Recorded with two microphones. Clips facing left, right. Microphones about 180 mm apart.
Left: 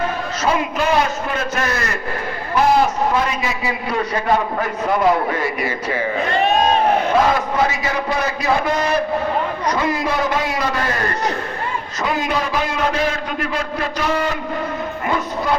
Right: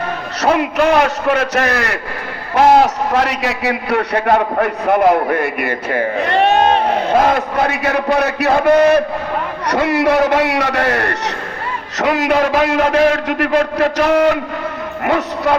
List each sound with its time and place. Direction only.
0.4 s a man's voice: 65° right (ahead or behind)